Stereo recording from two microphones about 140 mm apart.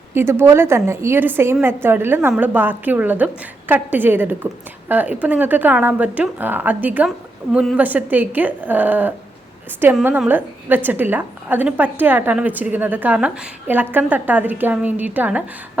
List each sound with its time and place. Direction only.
0.1 s a woman's voice: 15° right (ahead or behind)
7.5 s a woman's voice: centre (ahead or behind)
7.8 s a woman's voice: 10° right (ahead or behind)